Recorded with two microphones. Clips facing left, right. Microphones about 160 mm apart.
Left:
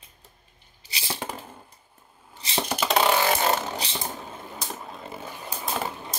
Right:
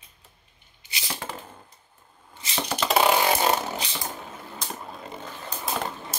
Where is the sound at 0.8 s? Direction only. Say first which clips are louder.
Left 1 dB; 30° left (ahead or behind).